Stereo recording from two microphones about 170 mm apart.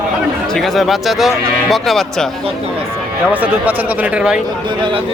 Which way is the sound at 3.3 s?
10° right (ahead or behind).